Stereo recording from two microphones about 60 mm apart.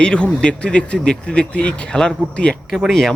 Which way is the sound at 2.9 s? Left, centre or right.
Centre.